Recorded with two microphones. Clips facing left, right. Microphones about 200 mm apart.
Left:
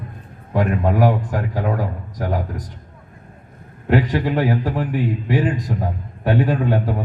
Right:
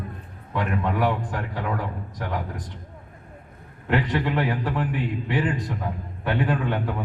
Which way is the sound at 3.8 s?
45° left (ahead or behind).